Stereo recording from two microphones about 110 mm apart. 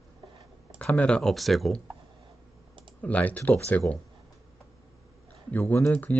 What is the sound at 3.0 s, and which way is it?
Speech, 15° left (ahead or behind).